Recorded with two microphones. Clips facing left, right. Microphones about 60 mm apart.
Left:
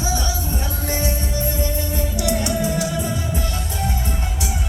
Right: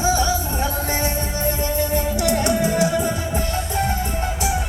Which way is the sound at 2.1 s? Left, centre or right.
Right.